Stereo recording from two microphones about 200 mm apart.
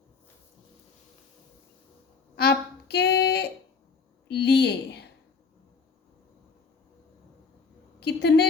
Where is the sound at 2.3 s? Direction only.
50° left (ahead or behind).